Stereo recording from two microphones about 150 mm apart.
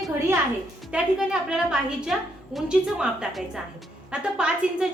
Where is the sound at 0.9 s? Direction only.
5° right (ahead or behind).